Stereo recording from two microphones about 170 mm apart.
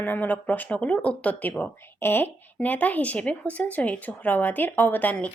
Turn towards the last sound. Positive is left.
turn(degrees=10)  # may be behind; listen again after turning